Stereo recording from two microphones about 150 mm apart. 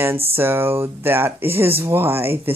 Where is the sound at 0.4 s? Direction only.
15° right (ahead or behind).